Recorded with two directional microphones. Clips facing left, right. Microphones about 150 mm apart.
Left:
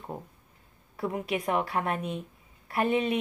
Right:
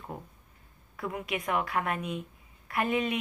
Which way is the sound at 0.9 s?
35° left (ahead or behind).